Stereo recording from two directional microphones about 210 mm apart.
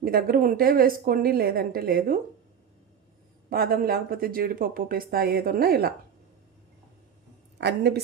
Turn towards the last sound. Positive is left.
turn(degrees=-55)  # may be behind; listen again after turning